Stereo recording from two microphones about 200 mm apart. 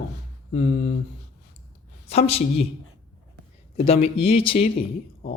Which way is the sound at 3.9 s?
30° left (ahead or behind).